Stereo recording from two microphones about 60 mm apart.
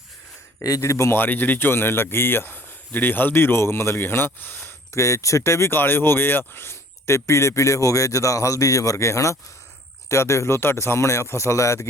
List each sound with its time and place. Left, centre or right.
0.8 s speech: left
1.1 s speech: left
4.9 s speech: left
5.7 s speech: left